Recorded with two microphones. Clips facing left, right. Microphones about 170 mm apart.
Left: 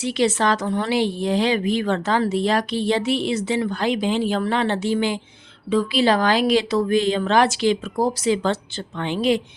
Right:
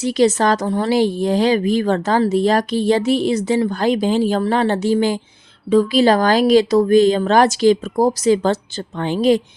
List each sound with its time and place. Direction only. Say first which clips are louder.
0.0 s a woman's voice: right 5 dB; 40° right (ahead or behind)